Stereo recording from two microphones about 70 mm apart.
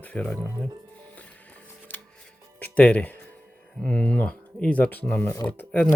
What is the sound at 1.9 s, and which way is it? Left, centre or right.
Music, left.